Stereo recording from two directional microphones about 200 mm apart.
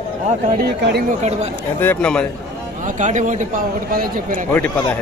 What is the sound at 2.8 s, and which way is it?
A man's voice, 40° right (ahead or behind).